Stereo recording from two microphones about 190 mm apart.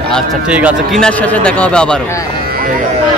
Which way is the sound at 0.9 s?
5° left (ahead or behind).